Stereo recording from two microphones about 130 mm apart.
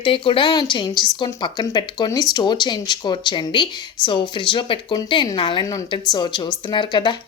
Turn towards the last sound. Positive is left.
turn(degrees=35)  # may be behind; listen again after turning